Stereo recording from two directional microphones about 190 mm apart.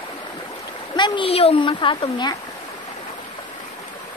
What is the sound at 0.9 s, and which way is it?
Speech, 25° left (ahead or behind).